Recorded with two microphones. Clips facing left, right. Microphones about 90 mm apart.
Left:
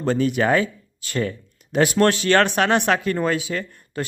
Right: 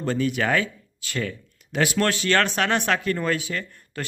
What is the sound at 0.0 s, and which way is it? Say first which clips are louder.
Speech: left 4 dB; 25° left (ahead or behind).